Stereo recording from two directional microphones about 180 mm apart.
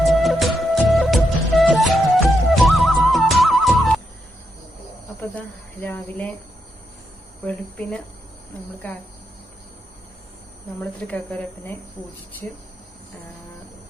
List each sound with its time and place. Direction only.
0.0 s music: centre (ahead or behind)
5.8 s speech: 10° left (ahead or behind)
7.4 s speech: 5° left (ahead or behind)
10.8 s speech: 5° left (ahead or behind)